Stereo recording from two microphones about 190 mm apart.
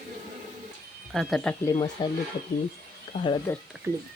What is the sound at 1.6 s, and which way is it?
Speech, 15° left (ahead or behind).